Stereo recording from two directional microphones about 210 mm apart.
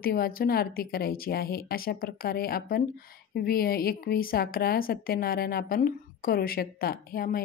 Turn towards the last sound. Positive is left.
turn(degrees=45)  # may be behind; listen again after turning